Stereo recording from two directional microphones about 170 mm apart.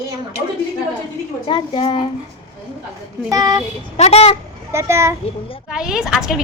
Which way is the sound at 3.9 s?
40° left (ahead or behind).